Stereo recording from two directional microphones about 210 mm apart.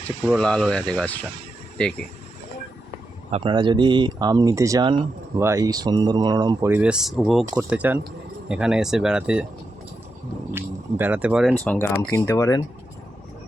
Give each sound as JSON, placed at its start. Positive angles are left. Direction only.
{"t": 0.3, "sound": "speech", "side_deg": 5}
{"t": 3.3, "sound": "speech", "side_deg": -20}
{"t": 10.5, "sound": "speech", "side_deg": -10}
{"t": 11.6, "sound": "speech", "side_deg": 10}